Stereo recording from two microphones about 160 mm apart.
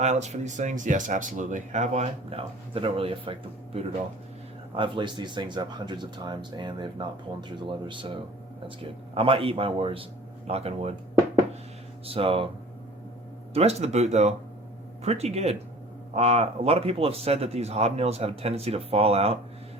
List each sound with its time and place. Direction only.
0.0 s speech: 45° right (ahead or behind)
4.7 s speech: 30° right (ahead or behind)
13.5 s speech: 40° right (ahead or behind)